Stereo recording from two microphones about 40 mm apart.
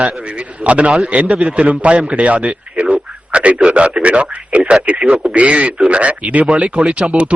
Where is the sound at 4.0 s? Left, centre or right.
Right.